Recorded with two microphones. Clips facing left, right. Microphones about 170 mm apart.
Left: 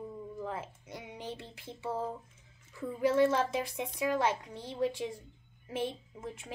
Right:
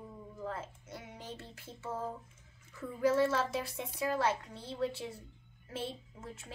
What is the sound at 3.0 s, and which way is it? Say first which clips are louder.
A woman's voice: left 2 dB; 15° left (ahead or behind).